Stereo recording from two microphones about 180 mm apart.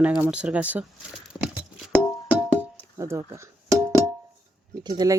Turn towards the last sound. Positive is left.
turn(degrees=-20)  # may be behind; listen again after turning